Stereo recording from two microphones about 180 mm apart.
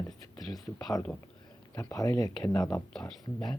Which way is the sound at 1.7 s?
20° left (ahead or behind).